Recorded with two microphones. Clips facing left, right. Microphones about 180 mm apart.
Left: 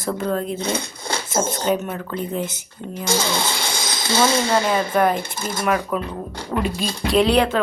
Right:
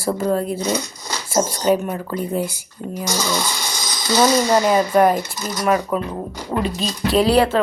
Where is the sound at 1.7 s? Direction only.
10° right (ahead or behind).